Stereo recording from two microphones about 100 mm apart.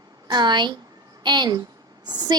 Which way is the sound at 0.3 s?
45° right (ahead or behind).